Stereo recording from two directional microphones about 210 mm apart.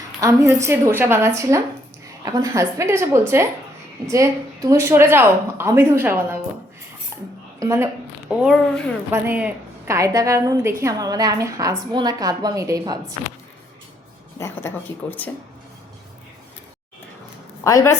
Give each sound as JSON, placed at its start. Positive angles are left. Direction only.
{"t": 0.2, "sound": "a woman's voice", "side_deg": -15}
{"t": 7.1, "sound": "cutlery", "side_deg": -15}
{"t": 7.6, "sound": "a woman's voice", "side_deg": -10}
{"t": 14.3, "sound": "speech", "side_deg": 10}
{"t": 17.6, "sound": "a woman's voice", "side_deg": 15}